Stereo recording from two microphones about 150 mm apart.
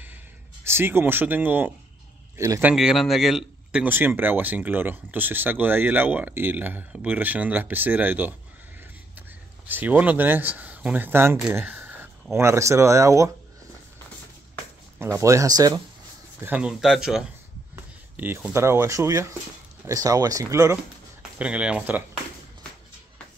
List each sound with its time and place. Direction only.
0.7 s a man's voice: 15° right (ahead or behind)
2.7 s a man's voice: 5° right (ahead or behind)
9.7 s a man's voice: 10° right (ahead or behind)
15.0 s speech: 20° right (ahead or behind)
16.4 s speech: 5° right (ahead or behind)
17.7 s speech: 15° right (ahead or behind)
21.4 s a man's voice: 10° right (ahead or behind)